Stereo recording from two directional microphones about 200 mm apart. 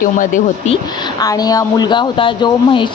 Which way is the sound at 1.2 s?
20° left (ahead or behind).